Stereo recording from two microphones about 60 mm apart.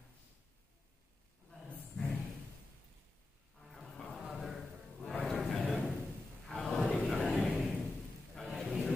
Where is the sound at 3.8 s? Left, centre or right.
Centre.